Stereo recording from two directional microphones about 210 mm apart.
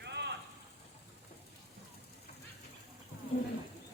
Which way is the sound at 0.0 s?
55° right (ahead or behind).